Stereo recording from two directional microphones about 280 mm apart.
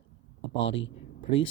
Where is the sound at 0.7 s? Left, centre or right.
Left.